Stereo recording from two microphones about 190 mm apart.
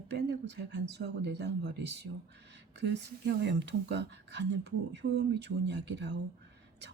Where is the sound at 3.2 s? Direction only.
65° right (ahead or behind).